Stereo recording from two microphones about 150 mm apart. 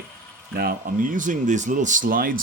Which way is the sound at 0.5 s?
85° right.